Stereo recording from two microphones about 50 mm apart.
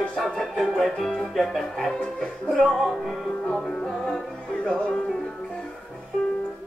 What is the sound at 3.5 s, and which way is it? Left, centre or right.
Music, centre.